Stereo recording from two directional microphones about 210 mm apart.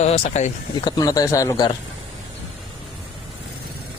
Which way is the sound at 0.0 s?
30° left (ahead or behind).